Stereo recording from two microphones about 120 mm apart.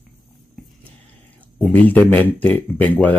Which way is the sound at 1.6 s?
15° left (ahead or behind).